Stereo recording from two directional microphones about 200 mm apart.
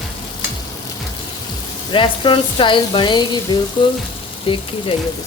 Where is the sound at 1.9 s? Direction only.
25° left (ahead or behind).